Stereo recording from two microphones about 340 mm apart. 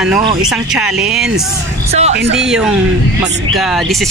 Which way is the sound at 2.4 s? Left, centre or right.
Centre.